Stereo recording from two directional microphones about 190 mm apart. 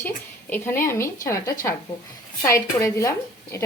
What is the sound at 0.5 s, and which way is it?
A woman's voice, 15° left (ahead or behind).